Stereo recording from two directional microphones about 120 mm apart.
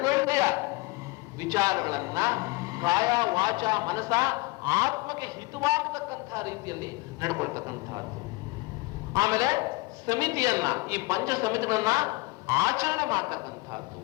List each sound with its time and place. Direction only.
0.0 s a sound: 30° right (ahead or behind)
1.4 s a man's voice: 25° right (ahead or behind)
9.1 s a man's voice: 30° right (ahead or behind)